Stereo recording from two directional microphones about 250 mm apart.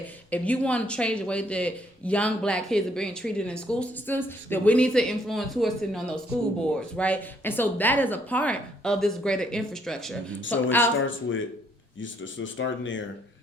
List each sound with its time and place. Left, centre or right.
0.3 s speech: centre
11.0 s speech: left